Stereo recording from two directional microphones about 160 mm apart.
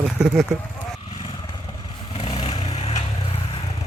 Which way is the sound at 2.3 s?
40° left (ahead or behind).